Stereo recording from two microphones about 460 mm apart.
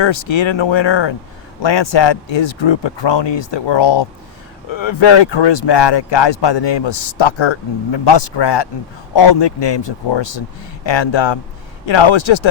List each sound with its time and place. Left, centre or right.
0.0 s speech: left